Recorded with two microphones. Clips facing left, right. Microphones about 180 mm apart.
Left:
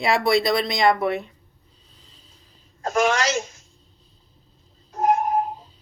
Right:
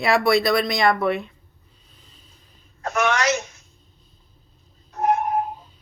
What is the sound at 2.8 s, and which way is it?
Speech, 30° left (ahead or behind).